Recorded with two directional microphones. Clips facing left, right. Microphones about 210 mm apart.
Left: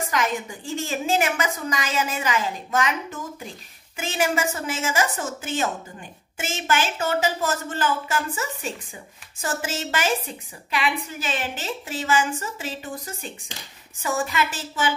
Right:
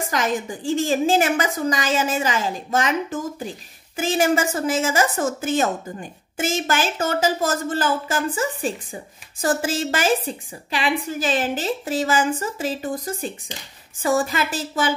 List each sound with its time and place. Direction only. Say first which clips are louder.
0.1 s a woman's voice: right 3 dB; 30° right (ahead or behind)
4.8 s a woman's voice: right 4 dB; 45° right (ahead or behind)